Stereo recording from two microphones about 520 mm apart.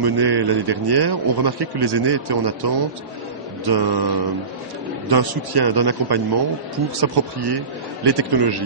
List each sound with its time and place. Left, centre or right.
0.0 s a man's voice: right